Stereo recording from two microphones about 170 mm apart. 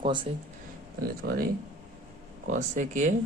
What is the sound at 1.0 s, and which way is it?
Speech, 60° right (ahead or behind).